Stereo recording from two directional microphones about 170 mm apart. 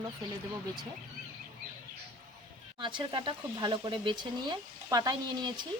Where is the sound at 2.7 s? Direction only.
30° right (ahead or behind).